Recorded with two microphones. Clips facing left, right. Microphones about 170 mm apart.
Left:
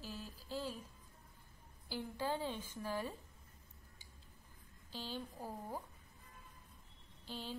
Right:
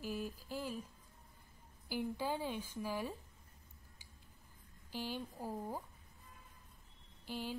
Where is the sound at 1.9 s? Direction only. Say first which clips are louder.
Right 2 dB; 15° right (ahead or behind).